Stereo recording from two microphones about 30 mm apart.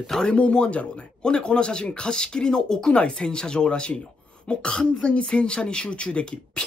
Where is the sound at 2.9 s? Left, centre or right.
Left.